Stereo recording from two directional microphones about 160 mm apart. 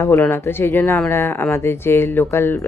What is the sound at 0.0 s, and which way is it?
Speech, 15° left (ahead or behind).